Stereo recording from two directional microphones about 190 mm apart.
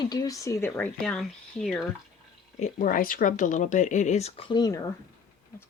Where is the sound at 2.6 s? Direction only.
45° left (ahead or behind).